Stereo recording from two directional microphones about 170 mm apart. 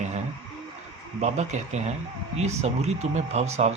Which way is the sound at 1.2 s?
40° right (ahead or behind).